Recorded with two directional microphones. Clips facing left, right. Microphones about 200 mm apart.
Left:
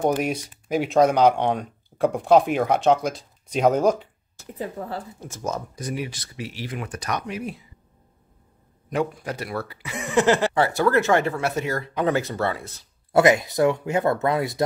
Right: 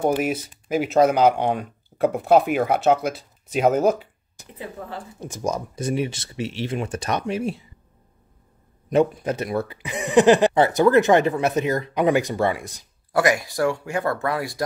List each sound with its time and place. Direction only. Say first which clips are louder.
0.0 s speech: right 1 dB; 5° right (ahead or behind)
4.6 s speech: left 3 dB; 40° left (ahead or behind)
5.2 s speech: right 5 dB; 15° right (ahead or behind)
5.8 s speech: right 5 dB; 25° right (ahead or behind)
8.9 s speech: right 6 dB; 20° right (ahead or behind)
13.1 s speech: left 3 dB; 25° left (ahead or behind)